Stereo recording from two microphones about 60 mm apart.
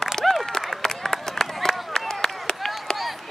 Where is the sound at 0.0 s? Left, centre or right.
Centre.